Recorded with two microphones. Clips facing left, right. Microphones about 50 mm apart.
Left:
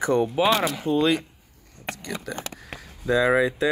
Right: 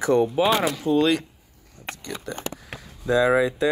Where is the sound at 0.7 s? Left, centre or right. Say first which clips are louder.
Right 1 dB; centre.